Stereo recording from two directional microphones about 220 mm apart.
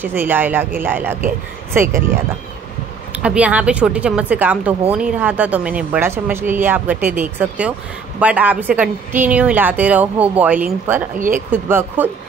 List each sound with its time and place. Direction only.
0.0 s speech: 10° right (ahead or behind)
3.2 s speech: 5° right (ahead or behind)
11.1 s speech: 35° right (ahead or behind)
11.5 s speech: 10° right (ahead or behind)